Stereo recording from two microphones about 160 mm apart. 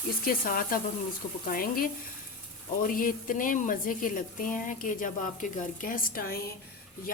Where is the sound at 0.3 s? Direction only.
65° left (ahead or behind).